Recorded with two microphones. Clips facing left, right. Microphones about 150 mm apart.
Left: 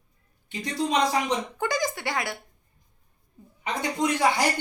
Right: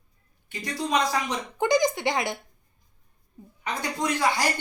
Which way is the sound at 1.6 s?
20° right (ahead or behind).